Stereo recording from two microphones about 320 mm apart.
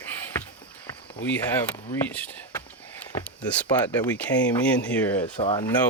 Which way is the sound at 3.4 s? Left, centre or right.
Centre.